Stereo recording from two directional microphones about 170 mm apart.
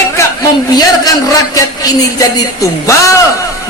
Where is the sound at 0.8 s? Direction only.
20° left (ahead or behind).